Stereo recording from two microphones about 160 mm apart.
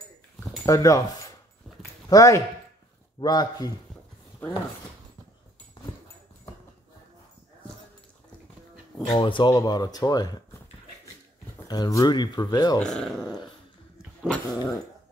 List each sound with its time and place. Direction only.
0.7 s speech: 20° left (ahead or behind)
9.2 s speech: 30° left (ahead or behind)
11.6 s speech: 25° left (ahead or behind)
12.8 s dog: centre (ahead or behind)